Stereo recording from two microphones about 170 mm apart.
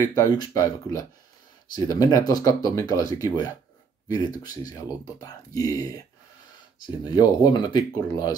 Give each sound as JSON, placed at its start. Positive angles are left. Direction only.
{"t": 0.1, "sound": "speech", "side_deg": 25}
{"t": 7.1, "sound": "speech", "side_deg": 25}